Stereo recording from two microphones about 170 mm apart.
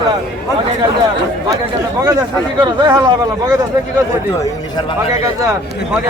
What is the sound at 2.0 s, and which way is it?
Speech, 20° right (ahead or behind).